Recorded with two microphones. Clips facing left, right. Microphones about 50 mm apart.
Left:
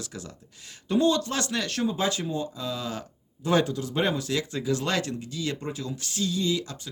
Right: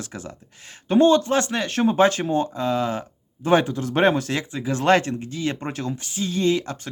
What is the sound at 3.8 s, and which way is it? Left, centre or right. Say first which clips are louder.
Speech: right 7 dB; right.